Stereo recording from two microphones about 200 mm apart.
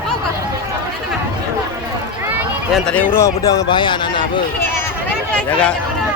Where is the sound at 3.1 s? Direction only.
15° left (ahead or behind).